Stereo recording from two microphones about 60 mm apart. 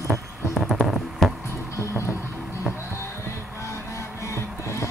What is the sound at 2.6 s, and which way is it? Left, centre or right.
Music, left.